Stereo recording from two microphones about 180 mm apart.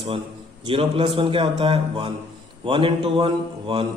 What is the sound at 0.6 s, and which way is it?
A man's voice, 30° right (ahead or behind).